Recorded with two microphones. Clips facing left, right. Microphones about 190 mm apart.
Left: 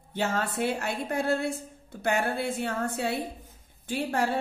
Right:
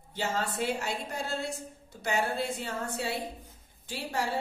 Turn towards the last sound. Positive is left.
turn(degrees=55)  # may be behind; listen again after turning